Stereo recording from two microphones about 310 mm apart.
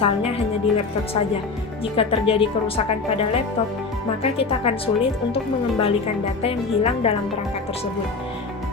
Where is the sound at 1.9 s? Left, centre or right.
Centre.